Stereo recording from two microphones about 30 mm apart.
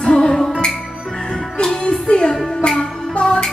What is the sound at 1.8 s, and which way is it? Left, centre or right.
Music, left.